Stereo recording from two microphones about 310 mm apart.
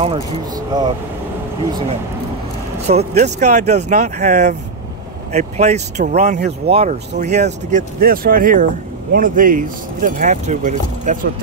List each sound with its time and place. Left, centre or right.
0.0 s speech: centre
2.8 s speech: right